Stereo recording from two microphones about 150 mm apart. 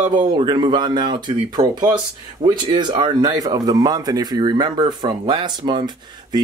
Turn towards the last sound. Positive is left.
turn(degrees=-30)  # may be behind; listen again after turning